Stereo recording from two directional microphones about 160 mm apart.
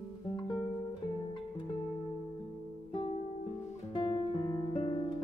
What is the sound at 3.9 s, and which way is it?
Music, 30° left (ahead or behind).